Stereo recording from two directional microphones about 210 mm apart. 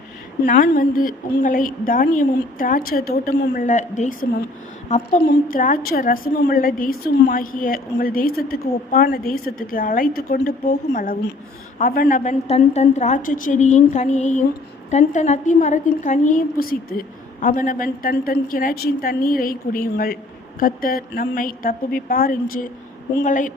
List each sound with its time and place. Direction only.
0.4 s a woman's voice: 40° left (ahead or behind)